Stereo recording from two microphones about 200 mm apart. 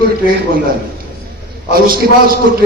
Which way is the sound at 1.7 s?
45° right (ahead or behind).